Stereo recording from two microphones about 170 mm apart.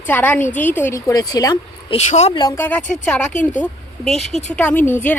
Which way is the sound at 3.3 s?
45° left (ahead or behind).